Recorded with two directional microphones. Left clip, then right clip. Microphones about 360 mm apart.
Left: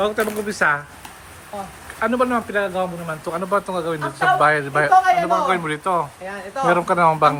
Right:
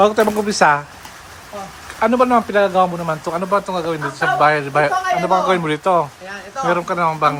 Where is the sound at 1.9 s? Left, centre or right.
Centre.